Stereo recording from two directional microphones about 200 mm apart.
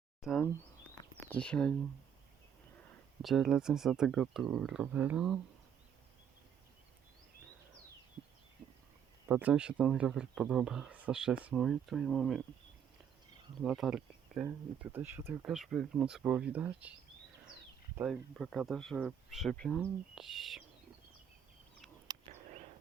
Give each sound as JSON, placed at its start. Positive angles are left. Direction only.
{"t": 0.2, "sound": "speech", "side_deg": 0}
{"t": 3.2, "sound": "speech", "side_deg": 0}
{"t": 9.3, "sound": "speech", "side_deg": -5}
{"t": 13.6, "sound": "speech", "side_deg": 0}
{"t": 17.9, "sound": "speech", "side_deg": -5}
{"t": 22.3, "sound": "a sound", "side_deg": -35}